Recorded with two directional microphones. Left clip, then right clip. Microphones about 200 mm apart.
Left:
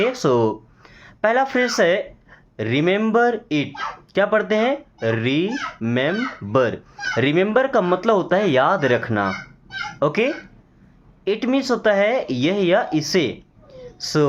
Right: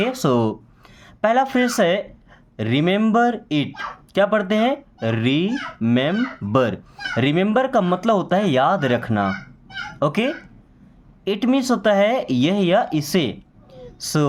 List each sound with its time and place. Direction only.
0.0 s speech: 40° right (ahead or behind)